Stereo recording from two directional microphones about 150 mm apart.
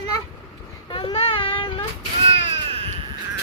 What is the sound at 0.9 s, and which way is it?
Child singing, 35° left (ahead or behind).